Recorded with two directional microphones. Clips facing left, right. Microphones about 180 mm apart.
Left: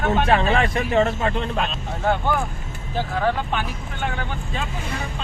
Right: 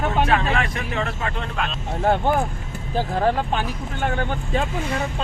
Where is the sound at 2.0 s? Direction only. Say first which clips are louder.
Right 2 dB; 35° right (ahead or behind).